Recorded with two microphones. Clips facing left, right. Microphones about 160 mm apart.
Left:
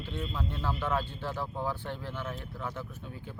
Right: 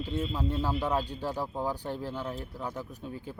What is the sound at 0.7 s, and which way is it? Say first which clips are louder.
Speech: right 2 dB; 40° right (ahead or behind).